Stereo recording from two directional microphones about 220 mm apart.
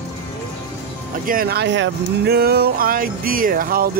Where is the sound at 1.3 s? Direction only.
45° right (ahead or behind).